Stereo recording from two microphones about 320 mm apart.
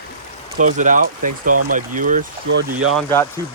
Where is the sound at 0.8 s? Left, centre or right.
Right.